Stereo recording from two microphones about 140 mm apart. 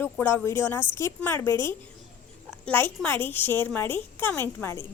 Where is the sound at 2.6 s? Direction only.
10° left (ahead or behind).